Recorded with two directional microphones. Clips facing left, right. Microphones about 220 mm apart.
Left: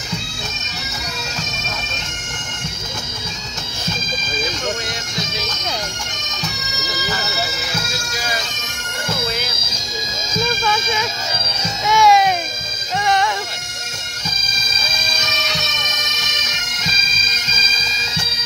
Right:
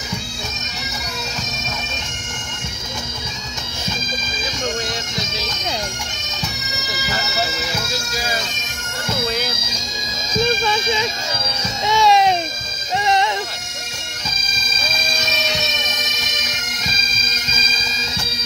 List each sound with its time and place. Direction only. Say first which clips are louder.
10.4 s music: right 2 dB; 25° right (ahead or behind)